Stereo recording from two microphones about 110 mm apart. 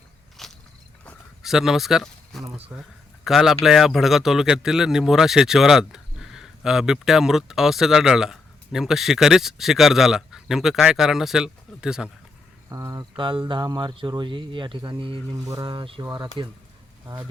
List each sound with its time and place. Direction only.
0.4 s biting: centre (ahead or behind)
1.4 s speech: 5° right (ahead or behind)
12.7 s speech: 30° right (ahead or behind)
13.1 s speech: 50° right (ahead or behind)
15.3 s speech: 40° right (ahead or behind)
16.0 s speech: 25° right (ahead or behind)